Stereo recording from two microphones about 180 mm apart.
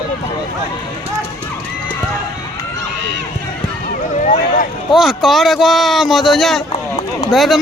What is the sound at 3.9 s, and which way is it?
Speech, 45° left (ahead or behind).